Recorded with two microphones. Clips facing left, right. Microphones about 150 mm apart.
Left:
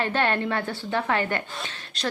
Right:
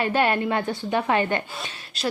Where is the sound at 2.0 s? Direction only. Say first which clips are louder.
Right 2 dB; 5° right (ahead or behind).